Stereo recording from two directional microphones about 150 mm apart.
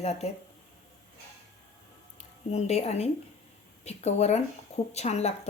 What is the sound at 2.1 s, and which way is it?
Speech, 45° left (ahead or behind).